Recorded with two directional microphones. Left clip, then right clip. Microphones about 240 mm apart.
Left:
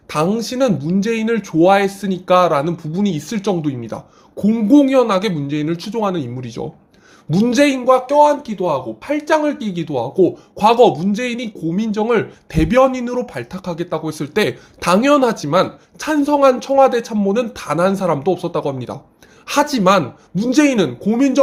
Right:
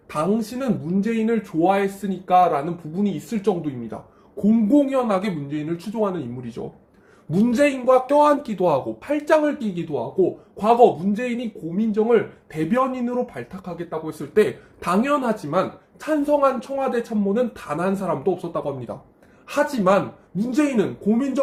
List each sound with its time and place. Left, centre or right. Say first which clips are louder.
0.1 s a man's voice: left 5 dB; left
8.0 s speech: left 4 dB; centre
9.0 s speech: left 3 dB; centre
9.7 s a man's voice: left 6 dB; left